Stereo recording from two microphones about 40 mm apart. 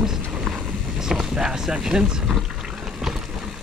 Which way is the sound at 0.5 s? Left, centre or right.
Centre.